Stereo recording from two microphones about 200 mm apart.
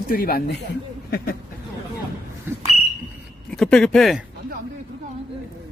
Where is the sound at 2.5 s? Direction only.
10° right (ahead or behind).